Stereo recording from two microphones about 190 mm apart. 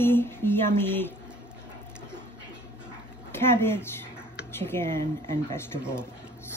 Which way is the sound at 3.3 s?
10° left (ahead or behind).